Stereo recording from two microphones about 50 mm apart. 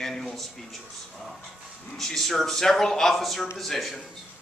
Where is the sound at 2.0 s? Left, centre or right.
Centre.